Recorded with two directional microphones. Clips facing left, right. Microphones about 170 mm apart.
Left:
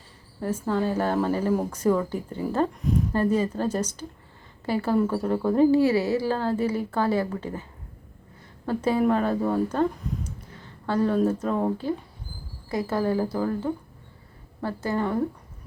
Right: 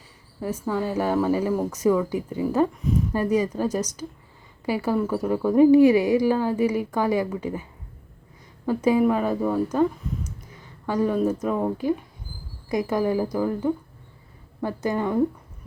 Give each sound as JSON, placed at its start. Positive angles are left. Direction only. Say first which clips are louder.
{"t": 0.3, "sound": "a woman's voice", "louder": "even", "side_deg": -10}
{"t": 8.6, "sound": "a woman's voice", "louder": "right 3 dB", "side_deg": -10}
{"t": 10.0, "sound": "a sound", "louder": "even", "side_deg": 0}
{"t": 10.5, "sound": "a sound", "louder": "even", "side_deg": -10}
{"t": 11.4, "sound": "speech", "louder": "right 1 dB", "side_deg": -5}
{"t": 12.6, "sound": "a woman's voice", "louder": "right 2 dB", "side_deg": -15}